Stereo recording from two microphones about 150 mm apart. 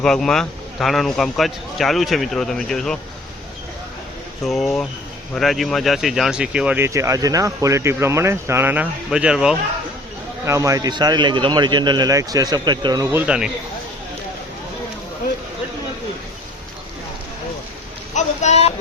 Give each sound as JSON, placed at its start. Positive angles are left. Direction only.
{"t": 0.0, "sound": "a man's voice", "side_deg": 5}
{"t": 4.4, "sound": "a man's voice", "side_deg": 0}
{"t": 10.4, "sound": "a man's voice", "side_deg": -20}
{"t": 18.1, "sound": "speech", "side_deg": 50}